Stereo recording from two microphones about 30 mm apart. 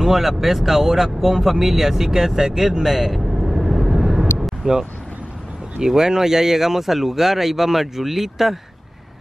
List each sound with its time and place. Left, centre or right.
0.0 s speech: centre
2.9 s vehicle: centre
4.6 s speech: right; by 8.5 s centre